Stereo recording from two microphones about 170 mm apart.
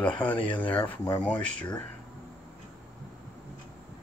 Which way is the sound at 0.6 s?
10° left (ahead or behind).